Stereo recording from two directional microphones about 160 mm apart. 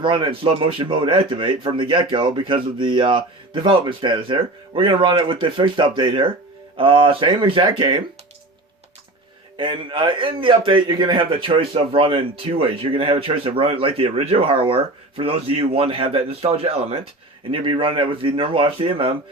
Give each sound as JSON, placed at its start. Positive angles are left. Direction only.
{"t": 0.0, "sound": "speech", "side_deg": -30}
{"t": 9.6, "sound": "speech", "side_deg": -30}